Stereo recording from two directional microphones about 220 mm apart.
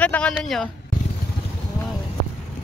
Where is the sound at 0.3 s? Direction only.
Centre (ahead or behind).